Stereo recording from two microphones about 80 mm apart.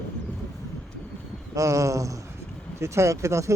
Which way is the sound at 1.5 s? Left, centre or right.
Right.